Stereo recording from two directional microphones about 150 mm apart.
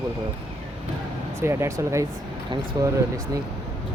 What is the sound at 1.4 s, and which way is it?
Speech, 20° right (ahead or behind).